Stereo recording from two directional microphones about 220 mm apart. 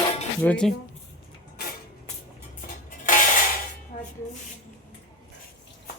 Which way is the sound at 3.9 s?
35° left (ahead or behind).